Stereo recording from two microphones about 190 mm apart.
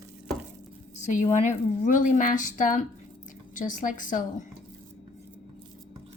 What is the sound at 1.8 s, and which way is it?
Speech, 40° left (ahead or behind).